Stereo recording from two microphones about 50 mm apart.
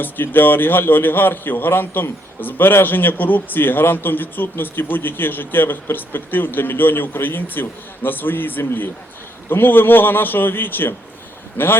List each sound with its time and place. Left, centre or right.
0.0 s a man's voice: left